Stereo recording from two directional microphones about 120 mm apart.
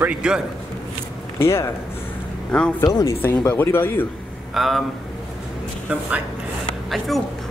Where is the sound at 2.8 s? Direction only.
30° left (ahead or behind).